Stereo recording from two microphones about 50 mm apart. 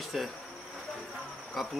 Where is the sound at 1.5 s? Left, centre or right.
Centre.